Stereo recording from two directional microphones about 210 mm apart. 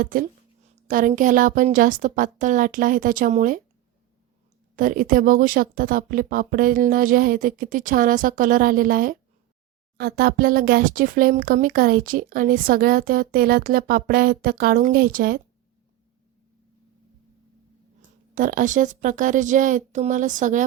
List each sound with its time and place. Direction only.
0.0 s speech: 40° right (ahead or behind)
4.8 s speech: 40° right (ahead or behind)
18.3 s speech: 40° right (ahead or behind)